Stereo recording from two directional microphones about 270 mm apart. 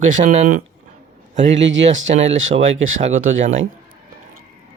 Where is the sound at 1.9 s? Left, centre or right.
Right.